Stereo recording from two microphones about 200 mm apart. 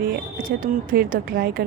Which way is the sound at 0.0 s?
45° right (ahead or behind).